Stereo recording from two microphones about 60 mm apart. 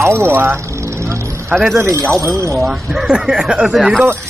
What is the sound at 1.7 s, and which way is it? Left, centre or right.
Speech, right.